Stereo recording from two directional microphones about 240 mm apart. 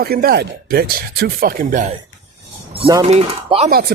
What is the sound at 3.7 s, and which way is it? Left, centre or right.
Speech, right.